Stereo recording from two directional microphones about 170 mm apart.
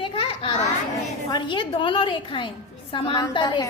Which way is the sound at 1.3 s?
30° left (ahead or behind).